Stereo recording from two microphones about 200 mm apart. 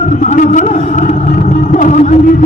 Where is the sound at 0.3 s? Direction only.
40° left (ahead or behind).